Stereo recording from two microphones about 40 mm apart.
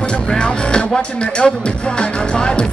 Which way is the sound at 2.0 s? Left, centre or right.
Left.